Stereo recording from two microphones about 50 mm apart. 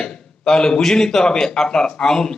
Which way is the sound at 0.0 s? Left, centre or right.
Centre.